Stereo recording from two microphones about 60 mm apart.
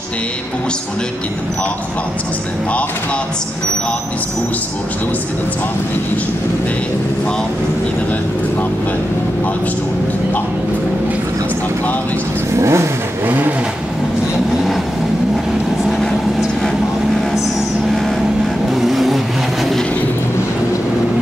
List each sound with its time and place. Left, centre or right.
12.5 s vehicle: right
18.7 s vehicle: centre